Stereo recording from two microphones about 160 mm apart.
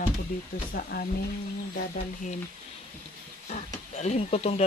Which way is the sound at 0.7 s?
75° left (ahead or behind).